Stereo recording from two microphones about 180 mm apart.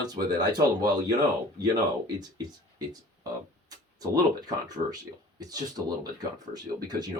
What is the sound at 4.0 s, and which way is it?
Speech, 20° right (ahead or behind).